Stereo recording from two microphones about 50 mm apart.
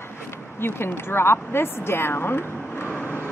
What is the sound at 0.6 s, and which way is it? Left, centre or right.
Speech, left.